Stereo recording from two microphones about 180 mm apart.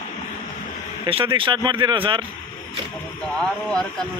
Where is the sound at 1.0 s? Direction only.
25° right (ahead or behind).